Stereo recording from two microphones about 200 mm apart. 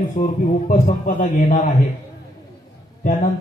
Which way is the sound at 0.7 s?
40° left (ahead or behind).